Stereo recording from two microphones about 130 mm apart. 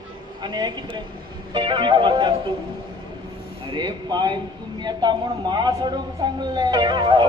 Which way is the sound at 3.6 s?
35° right (ahead or behind).